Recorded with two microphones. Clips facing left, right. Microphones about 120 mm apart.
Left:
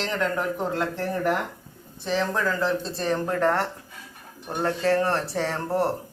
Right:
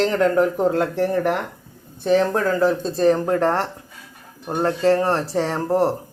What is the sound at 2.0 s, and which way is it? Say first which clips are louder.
Speech: right 7 dB; 50° right (ahead or behind).